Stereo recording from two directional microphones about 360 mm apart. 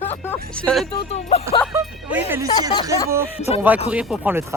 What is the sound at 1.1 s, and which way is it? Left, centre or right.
Speech, centre.